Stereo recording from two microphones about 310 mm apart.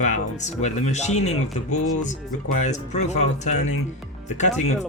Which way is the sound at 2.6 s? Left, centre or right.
Left.